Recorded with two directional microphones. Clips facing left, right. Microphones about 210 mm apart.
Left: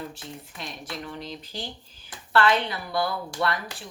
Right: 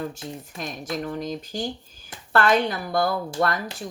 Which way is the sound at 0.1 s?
45° right (ahead or behind).